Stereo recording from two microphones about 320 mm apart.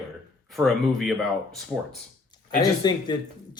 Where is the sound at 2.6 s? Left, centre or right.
Centre.